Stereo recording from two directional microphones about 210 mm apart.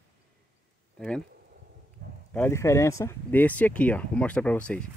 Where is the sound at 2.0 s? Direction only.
40° right (ahead or behind).